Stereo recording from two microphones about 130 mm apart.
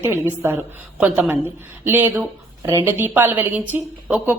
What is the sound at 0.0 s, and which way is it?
A woman's voice, 15° right (ahead or behind).